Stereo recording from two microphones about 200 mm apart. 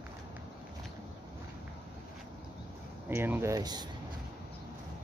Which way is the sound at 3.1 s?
10° right (ahead or behind).